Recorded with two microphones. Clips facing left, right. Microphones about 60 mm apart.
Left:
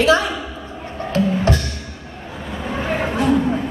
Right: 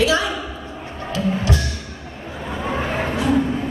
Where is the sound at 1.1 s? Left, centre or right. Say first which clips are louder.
Left 4 dB; left.